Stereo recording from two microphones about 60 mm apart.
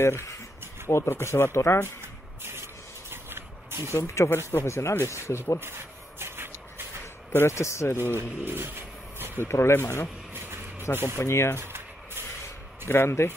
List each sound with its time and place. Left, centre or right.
0.0 s speech: left
2.4 s spray: right
3.9 s speech: left
5.6 s a sound: right
7.3 s speech: left
8.2 s vehicle: right
9.4 s speech: left
10.3 s a sound: right
11.1 s speech: left
11.6 s a sound: right
12.8 s speech: left